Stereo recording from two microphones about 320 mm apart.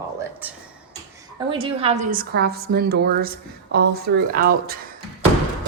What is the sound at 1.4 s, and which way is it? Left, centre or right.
A woman's voice, centre.